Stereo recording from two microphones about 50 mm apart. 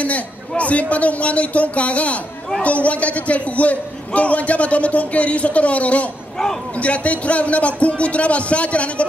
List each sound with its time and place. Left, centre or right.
0.0 s a man's voice: left